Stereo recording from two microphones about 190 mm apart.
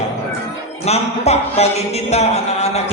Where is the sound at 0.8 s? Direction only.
35° left (ahead or behind).